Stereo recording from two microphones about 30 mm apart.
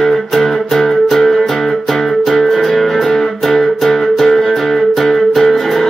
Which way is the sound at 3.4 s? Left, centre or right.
Centre.